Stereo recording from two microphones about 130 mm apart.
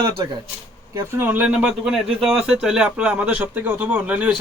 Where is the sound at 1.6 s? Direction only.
Centre (ahead or behind).